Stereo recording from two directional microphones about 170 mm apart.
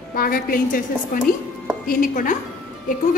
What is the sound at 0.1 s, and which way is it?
A woman's voice, 60° left (ahead or behind).